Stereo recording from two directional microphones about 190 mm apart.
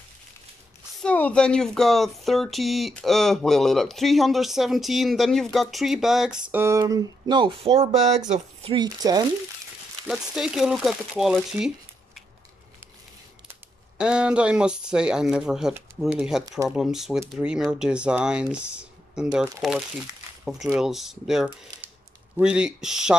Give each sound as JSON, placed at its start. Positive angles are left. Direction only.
{"t": 1.0, "sound": "speech", "side_deg": 5}
{"t": 6.5, "sound": "speech", "side_deg": -15}
{"t": 10.0, "sound": "speech", "side_deg": -5}
{"t": 13.9, "sound": "speech", "side_deg": -5}